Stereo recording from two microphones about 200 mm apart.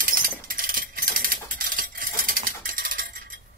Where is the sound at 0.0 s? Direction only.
45° right (ahead or behind).